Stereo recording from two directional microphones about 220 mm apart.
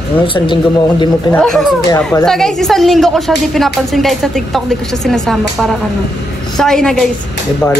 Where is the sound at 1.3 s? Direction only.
Centre (ahead or behind).